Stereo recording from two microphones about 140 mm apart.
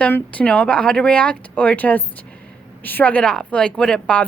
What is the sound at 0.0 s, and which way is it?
Speech, 10° left (ahead or behind).